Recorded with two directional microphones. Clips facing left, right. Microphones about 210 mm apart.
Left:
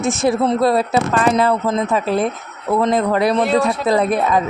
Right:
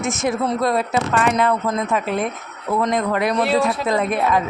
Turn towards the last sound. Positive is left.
turn(degrees=35)  # may be behind; listen again after turning